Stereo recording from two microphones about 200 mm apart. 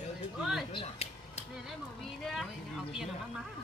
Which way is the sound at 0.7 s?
30° left (ahead or behind).